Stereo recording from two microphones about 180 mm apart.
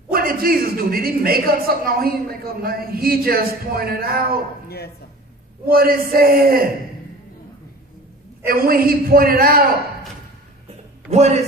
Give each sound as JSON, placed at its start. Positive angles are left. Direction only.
{"t": 0.1, "sound": "a man's voice", "side_deg": -55}
{"t": 4.6, "sound": "speech", "side_deg": 60}
{"t": 5.7, "sound": "a man's voice", "side_deg": -55}
{"t": 8.5, "sound": "a man's voice", "side_deg": -55}
{"t": 11.1, "sound": "a man's voice", "side_deg": -40}